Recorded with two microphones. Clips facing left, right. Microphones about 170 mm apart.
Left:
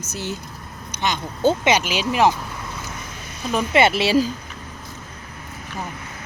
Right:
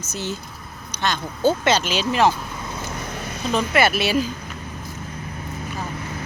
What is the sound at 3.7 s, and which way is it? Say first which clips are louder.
Speech: left 4 dB; 25° left (ahead or behind).